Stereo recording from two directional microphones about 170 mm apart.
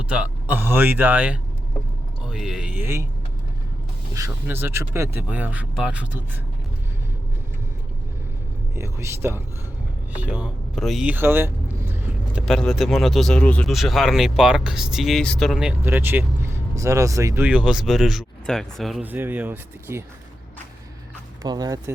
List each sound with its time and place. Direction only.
0.1 s speech: 10° right (ahead or behind)
4.3 s speech: 10° right (ahead or behind)
8.7 s speech: 15° right (ahead or behind)
12.5 s speech: centre (ahead or behind)
15.8 s speech: 15° right (ahead or behind)
17.4 s speech: 5° right (ahead or behind)
21.4 s speech: 25° right (ahead or behind)